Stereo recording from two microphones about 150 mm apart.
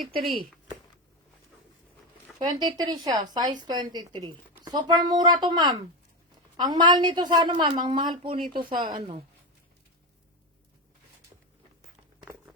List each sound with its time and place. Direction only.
0.1 s speech: 80° right
2.4 s a woman's voice: 30° right (ahead or behind)